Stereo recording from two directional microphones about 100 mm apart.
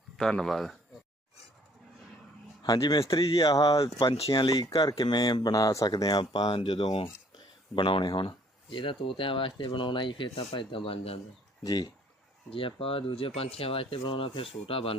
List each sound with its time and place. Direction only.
0.2 s speech: 5° left (ahead or behind)
2.6 s speech: 45° left (ahead or behind)
3.2 s speech: 55° left (ahead or behind)
3.5 s speech: 45° left (ahead or behind)
3.8 s speech: 65° left (ahead or behind)
4.3 s speech: 50° left (ahead or behind)
6.6 s speech: 65° left (ahead or behind)
11.6 s speech: 40° left (ahead or behind)
12.5 s speech: 65° left (ahead or behind)